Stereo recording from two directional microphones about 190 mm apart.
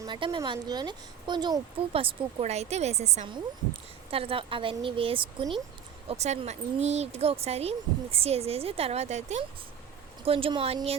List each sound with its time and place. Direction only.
0.0 s speech: 25° right (ahead or behind)